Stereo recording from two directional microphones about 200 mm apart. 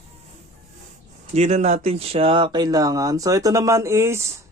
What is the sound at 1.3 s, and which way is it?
Speech, 35° right (ahead or behind).